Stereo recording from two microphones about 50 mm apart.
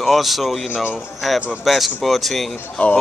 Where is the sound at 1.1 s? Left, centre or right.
Centre.